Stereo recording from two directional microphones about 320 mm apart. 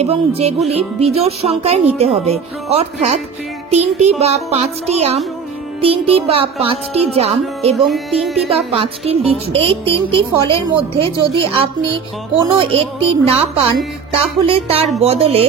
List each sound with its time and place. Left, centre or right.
0.0 s a woman's voice: centre
7.7 s speech: centre
8.5 s a woman's voice: centre